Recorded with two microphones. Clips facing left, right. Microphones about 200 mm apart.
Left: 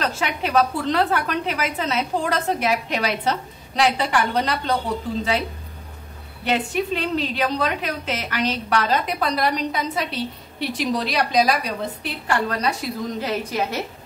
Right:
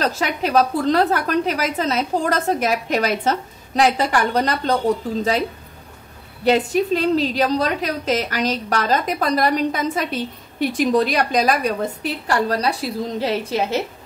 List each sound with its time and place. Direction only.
0.0 s a woman's voice: 40° right (ahead or behind)
6.4 s a woman's voice: 40° right (ahead or behind)